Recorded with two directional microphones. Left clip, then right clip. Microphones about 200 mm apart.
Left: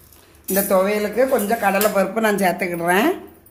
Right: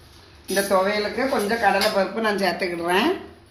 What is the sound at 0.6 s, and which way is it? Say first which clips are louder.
Speech: left 3 dB; 75° left (ahead or behind).